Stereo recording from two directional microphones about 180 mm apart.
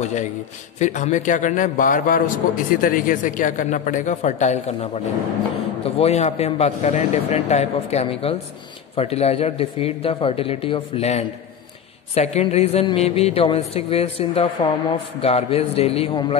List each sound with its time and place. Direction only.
0.0 s a man's voice: 40° left (ahead or behind)